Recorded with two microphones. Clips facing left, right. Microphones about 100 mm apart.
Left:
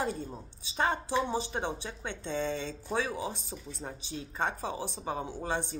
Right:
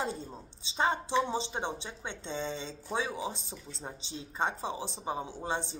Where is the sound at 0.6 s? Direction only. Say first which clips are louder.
Even; 20° right (ahead or behind).